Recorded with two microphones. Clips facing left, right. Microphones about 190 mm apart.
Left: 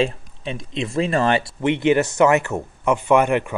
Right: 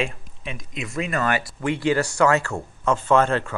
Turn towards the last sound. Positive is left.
turn(degrees=15)  # may be behind; listen again after turning